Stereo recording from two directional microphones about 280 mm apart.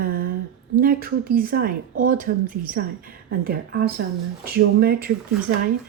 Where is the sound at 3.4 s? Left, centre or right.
Right.